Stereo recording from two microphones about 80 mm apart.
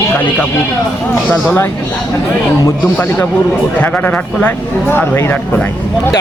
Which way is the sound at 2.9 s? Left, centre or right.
Left.